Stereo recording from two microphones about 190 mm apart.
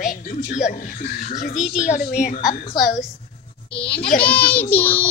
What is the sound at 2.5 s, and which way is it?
Speech, 30° left (ahead or behind).